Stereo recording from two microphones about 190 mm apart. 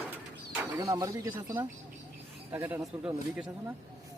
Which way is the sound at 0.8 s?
15° right (ahead or behind).